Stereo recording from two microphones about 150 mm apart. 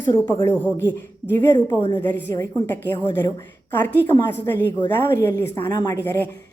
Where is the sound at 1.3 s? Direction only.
30° left (ahead or behind).